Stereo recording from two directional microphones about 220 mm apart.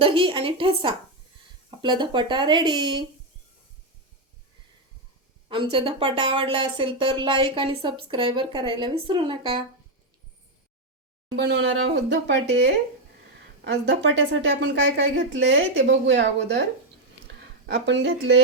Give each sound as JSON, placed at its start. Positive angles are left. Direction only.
{"t": 0.0, "sound": "speech", "side_deg": -25}
{"t": 5.5, "sound": "speech", "side_deg": -25}
{"t": 11.3, "sound": "a woman's voice", "side_deg": -60}
{"t": 14.0, "sound": "a woman's voice", "side_deg": -50}